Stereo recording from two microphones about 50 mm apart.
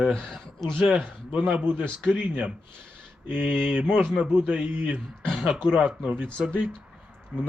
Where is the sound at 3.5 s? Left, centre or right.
Centre.